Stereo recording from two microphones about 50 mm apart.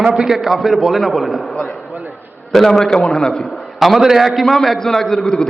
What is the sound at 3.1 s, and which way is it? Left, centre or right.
Speech, centre.